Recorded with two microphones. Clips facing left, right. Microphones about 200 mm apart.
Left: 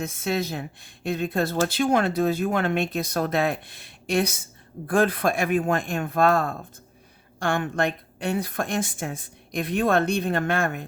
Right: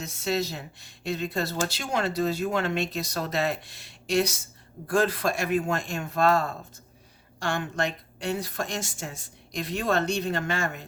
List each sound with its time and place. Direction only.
0.0 s a woman's voice: 55° left (ahead or behind)